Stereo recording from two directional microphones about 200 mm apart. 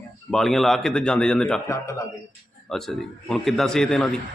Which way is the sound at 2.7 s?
Centre (ahead or behind).